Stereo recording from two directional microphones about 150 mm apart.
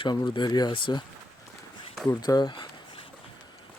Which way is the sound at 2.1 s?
25° left (ahead or behind).